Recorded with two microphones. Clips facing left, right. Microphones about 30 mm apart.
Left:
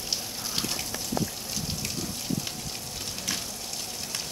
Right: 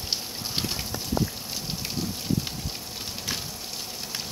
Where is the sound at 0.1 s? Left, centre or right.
Right.